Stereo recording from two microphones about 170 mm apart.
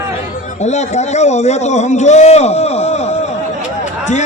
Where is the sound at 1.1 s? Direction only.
40° left (ahead or behind).